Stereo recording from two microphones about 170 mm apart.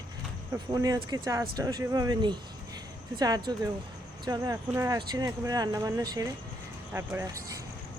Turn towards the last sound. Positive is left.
turn(degrees=-15)  # may be behind; listen again after turning